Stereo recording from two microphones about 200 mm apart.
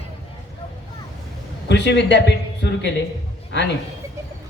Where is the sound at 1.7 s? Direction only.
60° left (ahead or behind).